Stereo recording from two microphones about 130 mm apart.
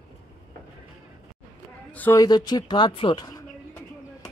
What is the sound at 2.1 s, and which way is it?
Speech, 30° left (ahead or behind).